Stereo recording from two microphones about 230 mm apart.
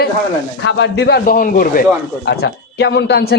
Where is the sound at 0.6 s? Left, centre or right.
Left.